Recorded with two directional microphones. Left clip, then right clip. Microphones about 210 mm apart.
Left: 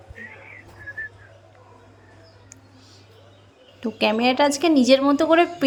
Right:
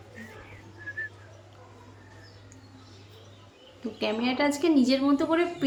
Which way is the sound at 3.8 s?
40° left (ahead or behind).